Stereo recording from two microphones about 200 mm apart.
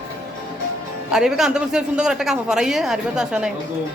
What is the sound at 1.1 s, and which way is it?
Speech, 5° right (ahead or behind).